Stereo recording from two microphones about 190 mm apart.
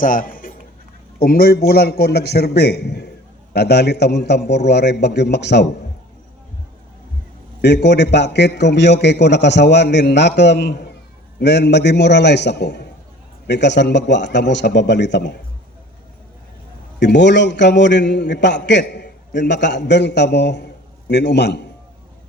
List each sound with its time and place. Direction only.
0.0 s a sound: 45° left (ahead or behind)
1.2 s a man's voice: 50° left (ahead or behind)
7.6 s a man's voice: 65° left (ahead or behind)
17.0 s a man's voice: 65° left (ahead or behind)